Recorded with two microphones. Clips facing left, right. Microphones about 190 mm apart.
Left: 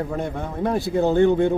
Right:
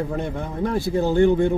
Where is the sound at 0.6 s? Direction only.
20° left (ahead or behind).